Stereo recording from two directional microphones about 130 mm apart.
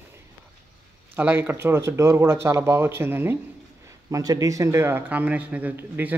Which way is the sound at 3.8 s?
25° right (ahead or behind).